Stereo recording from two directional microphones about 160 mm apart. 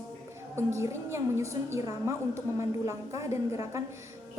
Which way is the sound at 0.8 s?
15° right (ahead or behind).